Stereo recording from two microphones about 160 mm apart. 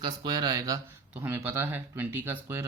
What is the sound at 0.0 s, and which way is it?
Speech, 25° right (ahead or behind).